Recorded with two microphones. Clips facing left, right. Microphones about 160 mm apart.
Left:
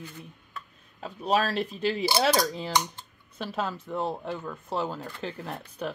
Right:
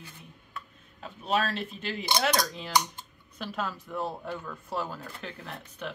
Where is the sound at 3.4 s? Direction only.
30° left (ahead or behind).